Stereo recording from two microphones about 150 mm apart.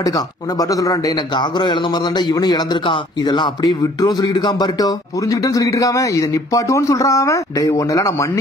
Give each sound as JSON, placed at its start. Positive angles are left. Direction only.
{"t": 0.0, "sound": "a man's voice", "side_deg": 25}